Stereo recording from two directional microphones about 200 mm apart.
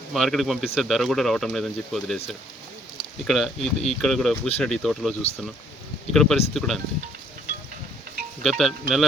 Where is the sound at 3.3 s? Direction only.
Centre (ahead or behind).